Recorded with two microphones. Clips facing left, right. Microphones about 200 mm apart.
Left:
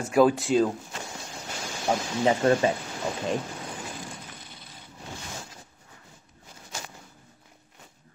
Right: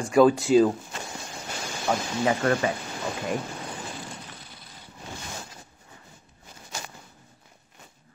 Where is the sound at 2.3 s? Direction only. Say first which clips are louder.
Left 3 dB; 25° left (ahead or behind).